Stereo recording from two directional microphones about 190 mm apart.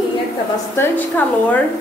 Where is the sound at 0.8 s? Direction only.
10° left (ahead or behind).